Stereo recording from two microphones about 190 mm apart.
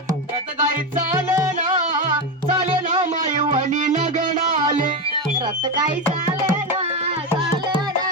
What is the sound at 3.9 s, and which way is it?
Music, 40° right (ahead or behind).